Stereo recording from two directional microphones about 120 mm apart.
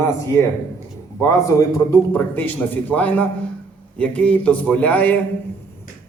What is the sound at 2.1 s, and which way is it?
A man's voice, 15° left (ahead or behind).